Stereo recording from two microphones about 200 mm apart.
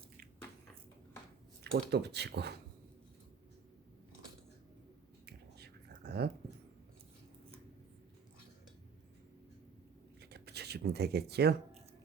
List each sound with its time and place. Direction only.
1.6 s speech: 55° right (ahead or behind)
5.2 s finger snapping: 55° right (ahead or behind)
10.2 s a sound: 55° right (ahead or behind)